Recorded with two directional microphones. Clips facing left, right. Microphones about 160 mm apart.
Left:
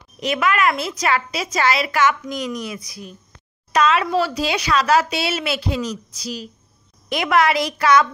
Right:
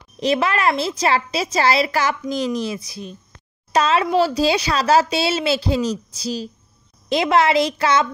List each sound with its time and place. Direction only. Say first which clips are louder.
0.2 s a woman's voice: right 1 dB; 30° right (ahead or behind)